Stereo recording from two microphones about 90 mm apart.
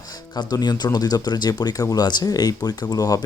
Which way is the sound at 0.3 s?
50° left (ahead or behind).